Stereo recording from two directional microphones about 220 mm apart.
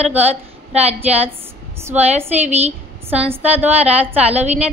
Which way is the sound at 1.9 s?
5° right (ahead or behind).